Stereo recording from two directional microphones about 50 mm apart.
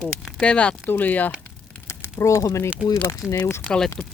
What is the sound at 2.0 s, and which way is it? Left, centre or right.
Speech, left.